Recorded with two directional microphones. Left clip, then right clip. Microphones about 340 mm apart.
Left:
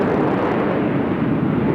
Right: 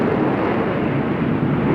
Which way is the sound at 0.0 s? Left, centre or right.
Left.